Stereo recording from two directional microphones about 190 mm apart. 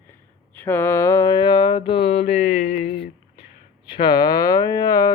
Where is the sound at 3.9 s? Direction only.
25° left (ahead or behind).